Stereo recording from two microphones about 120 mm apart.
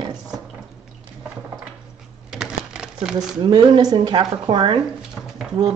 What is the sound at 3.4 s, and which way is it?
Speech, 35° right (ahead or behind).